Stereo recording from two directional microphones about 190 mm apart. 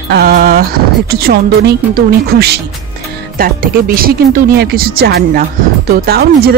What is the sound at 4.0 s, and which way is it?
Speech, 50° right (ahead or behind).